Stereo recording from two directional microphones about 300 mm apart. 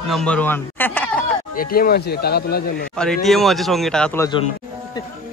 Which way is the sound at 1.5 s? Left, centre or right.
Left.